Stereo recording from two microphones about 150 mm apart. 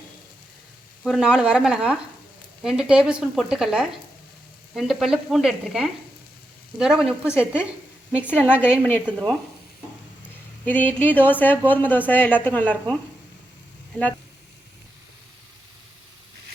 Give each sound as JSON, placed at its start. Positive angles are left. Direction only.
{"t": 1.0, "sound": "speech", "side_deg": 0}
{"t": 8.2, "sound": "speech", "side_deg": 10}
{"t": 8.4, "sound": "a woman's voice", "side_deg": -10}
{"t": 8.8, "sound": "speech", "side_deg": 10}
{"t": 10.7, "sound": "speech", "side_deg": 10}